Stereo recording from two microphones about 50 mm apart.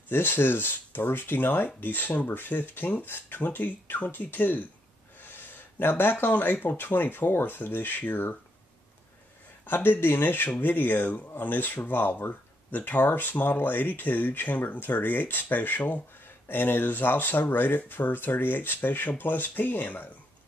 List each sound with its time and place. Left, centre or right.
0.1 s speech: left
9.7 s speech: left
16.4 s speech: left